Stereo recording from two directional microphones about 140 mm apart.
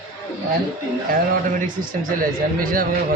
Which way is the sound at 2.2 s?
85° right.